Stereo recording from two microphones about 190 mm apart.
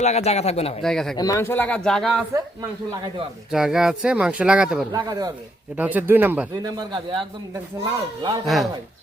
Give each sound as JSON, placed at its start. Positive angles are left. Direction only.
{"t": 0.0, "sound": "speech", "side_deg": 35}
{"t": 0.8, "sound": "speech", "side_deg": 0}
{"t": 1.1, "sound": "speech", "side_deg": 20}
{"t": 3.5, "sound": "speech", "side_deg": -5}
{"t": 4.9, "sound": "speech", "side_deg": -20}
{"t": 5.7, "sound": "speech", "side_deg": -10}
{"t": 6.6, "sound": "speech", "side_deg": -20}
{"t": 8.4, "sound": "speech", "side_deg": 0}